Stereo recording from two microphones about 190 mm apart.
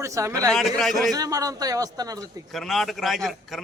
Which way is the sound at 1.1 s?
20° right (ahead or behind).